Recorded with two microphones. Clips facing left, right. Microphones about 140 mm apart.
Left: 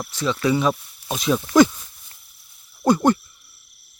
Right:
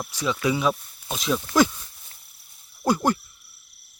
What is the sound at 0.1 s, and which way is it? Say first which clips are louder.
Speech: left 4 dB; 10° right (ahead or behind).